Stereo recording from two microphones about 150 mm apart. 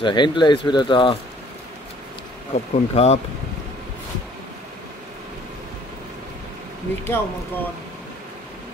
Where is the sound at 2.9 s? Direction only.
45° left (ahead or behind).